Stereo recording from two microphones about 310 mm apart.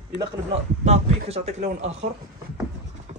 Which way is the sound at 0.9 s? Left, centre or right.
Centre.